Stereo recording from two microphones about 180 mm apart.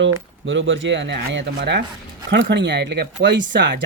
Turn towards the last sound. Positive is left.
turn(degrees=-80)